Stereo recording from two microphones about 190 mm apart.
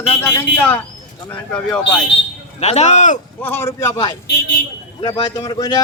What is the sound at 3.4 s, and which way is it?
A man's voice, 10° left (ahead or behind).